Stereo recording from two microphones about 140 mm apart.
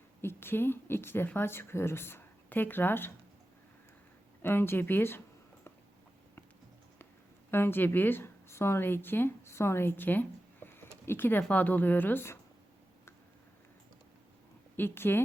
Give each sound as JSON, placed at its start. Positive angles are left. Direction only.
{"t": 0.2, "sound": "a woman's voice", "side_deg": 15}
{"t": 4.4, "sound": "a woman's voice", "side_deg": 15}
{"t": 7.5, "sound": "speech", "side_deg": 15}
{"t": 14.8, "sound": "a woman's voice", "side_deg": 15}